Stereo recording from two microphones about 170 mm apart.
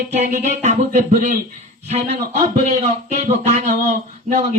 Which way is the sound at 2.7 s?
40° right (ahead or behind).